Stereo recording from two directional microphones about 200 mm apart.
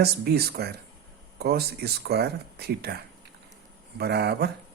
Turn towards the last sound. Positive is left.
turn(degrees=-55)  # may be behind; listen again after turning